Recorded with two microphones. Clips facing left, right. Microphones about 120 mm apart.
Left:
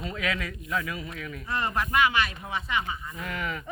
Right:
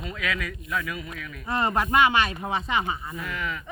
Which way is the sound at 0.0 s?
30° left (ahead or behind).